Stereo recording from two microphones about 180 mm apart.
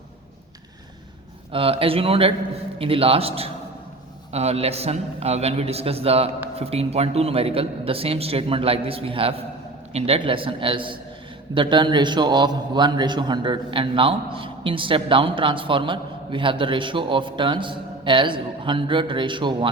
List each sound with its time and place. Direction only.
1.5 s a man's voice: 30° right (ahead or behind)